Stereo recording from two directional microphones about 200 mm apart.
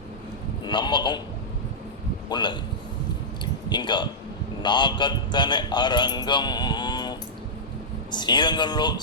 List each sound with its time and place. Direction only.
0.6 s a man's voice: 20° left (ahead or behind)
2.3 s speech: 20° left (ahead or behind)
3.4 s a sound: 20° left (ahead or behind)
4.6 s speech: 20° left (ahead or behind)